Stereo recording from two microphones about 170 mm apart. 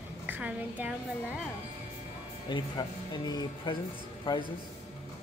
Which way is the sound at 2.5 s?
25° left (ahead or behind).